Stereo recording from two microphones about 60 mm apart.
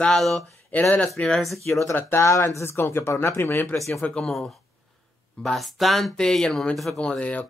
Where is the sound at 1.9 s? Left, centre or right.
Left.